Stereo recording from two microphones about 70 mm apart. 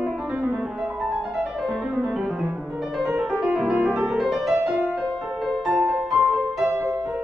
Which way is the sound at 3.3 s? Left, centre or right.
Centre.